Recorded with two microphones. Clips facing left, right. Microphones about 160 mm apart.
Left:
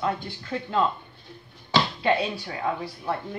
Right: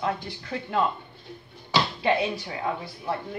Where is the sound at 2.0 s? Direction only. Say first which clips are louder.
Even; 20° right (ahead or behind).